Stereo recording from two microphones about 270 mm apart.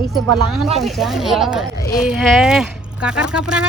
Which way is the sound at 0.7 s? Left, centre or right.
Centre.